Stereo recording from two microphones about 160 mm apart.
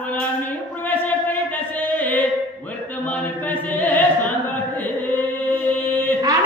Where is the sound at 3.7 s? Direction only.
10° left (ahead or behind).